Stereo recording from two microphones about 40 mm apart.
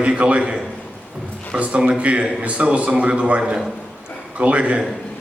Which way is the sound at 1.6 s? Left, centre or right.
Right.